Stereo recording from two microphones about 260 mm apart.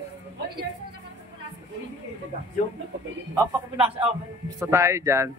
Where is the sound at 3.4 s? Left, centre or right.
Centre.